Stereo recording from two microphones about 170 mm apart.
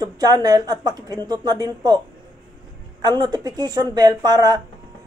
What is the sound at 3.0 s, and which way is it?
Speech, 25° right (ahead or behind).